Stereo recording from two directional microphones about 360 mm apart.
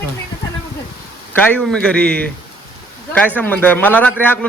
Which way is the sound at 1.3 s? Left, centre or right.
Centre.